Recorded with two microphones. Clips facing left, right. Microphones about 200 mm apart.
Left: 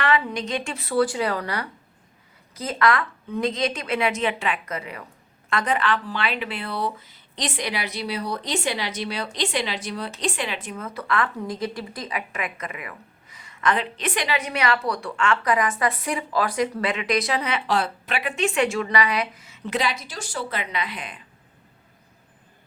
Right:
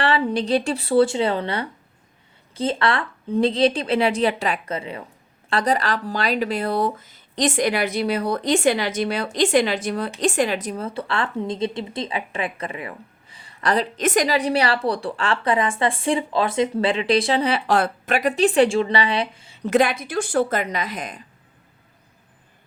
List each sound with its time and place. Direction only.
0.0 s a woman's voice: 30° right (ahead or behind)
17.7 s a woman's voice: 50° right (ahead or behind); by 19.6 s 30° right (ahead or behind)
19.6 s speech: 50° right (ahead or behind)